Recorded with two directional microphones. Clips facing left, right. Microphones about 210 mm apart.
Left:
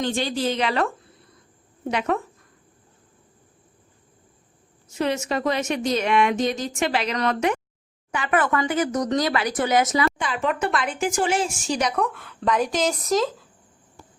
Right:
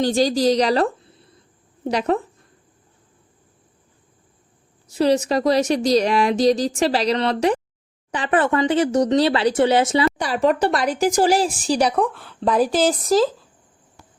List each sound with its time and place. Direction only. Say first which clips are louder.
0.0 s speech: right 7 dB; 35° right (ahead or behind)
4.9 s speech: right 7 dB; 35° right (ahead or behind)